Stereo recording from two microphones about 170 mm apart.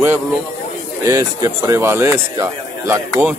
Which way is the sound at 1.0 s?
20° right (ahead or behind).